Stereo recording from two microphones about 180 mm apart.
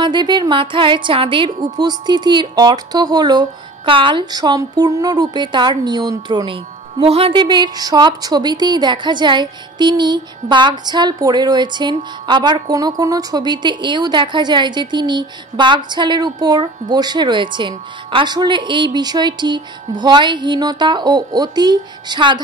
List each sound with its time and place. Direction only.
0.0 s a woman's voice: 25° right (ahead or behind)